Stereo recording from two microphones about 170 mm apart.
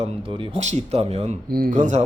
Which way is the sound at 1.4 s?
60° right (ahead or behind).